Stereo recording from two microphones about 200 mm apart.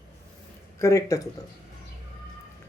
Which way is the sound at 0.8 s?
15° left (ahead or behind).